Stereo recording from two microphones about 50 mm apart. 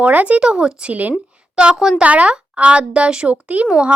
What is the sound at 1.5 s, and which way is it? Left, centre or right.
Speech, centre.